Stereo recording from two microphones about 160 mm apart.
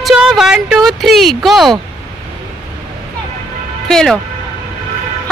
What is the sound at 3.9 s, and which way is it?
Speech, 5° left (ahead or behind).